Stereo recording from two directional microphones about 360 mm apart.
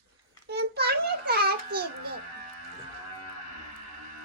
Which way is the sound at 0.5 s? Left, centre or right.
Right.